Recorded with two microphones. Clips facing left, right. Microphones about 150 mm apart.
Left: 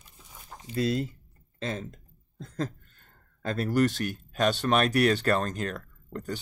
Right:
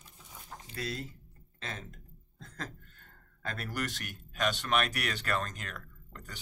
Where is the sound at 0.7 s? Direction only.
25° left (ahead or behind).